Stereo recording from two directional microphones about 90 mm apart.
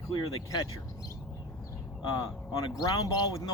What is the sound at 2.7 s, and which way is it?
Speech, 45° left (ahead or behind).